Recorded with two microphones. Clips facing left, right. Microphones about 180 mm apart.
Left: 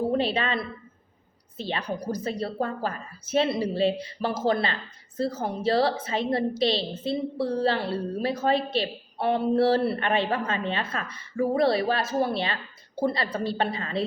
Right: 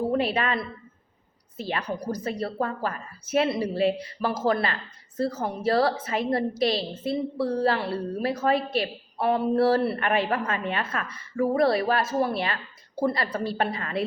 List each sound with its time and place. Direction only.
0.1 s a woman's voice: 30° left (ahead or behind)